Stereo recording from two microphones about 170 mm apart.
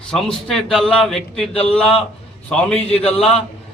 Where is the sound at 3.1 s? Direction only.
35° left (ahead or behind).